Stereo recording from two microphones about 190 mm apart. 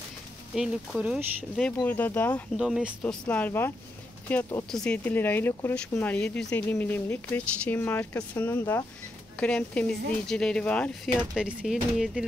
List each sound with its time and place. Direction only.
0.6 s speech: 5° right (ahead or behind)
1.9 s speech: 10° left (ahead or behind)
2.5 s speech: 5° right (ahead or behind)
3.0 s speech: 5° left (ahead or behind)